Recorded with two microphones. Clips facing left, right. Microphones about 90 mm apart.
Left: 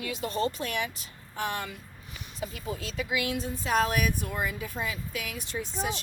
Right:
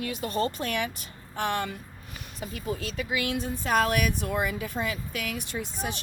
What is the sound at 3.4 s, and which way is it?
Speech, 60° right (ahead or behind).